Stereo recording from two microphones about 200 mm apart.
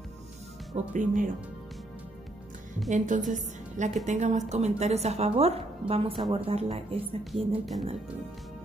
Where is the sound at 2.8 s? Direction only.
40° right (ahead or behind).